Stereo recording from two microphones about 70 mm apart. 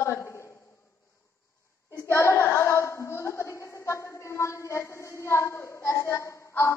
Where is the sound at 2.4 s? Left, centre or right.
Left.